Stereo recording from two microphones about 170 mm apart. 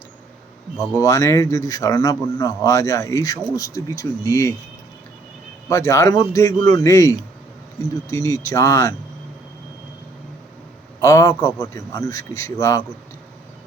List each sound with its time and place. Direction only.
0.9 s speech: 20° left (ahead or behind)
5.6 s speech: 20° left (ahead or behind)
11.0 s speech: 20° left (ahead or behind)